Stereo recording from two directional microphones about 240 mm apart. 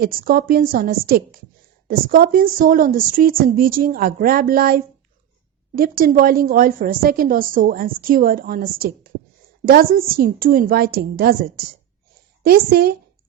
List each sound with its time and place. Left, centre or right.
0.0 s a woman's voice: right